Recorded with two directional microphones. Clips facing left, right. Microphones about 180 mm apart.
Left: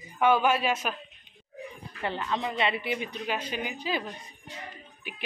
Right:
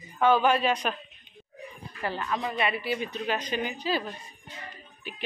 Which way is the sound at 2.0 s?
20° left (ahead or behind).